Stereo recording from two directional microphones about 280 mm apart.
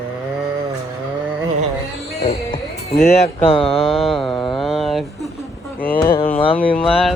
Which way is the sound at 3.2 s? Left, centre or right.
Centre.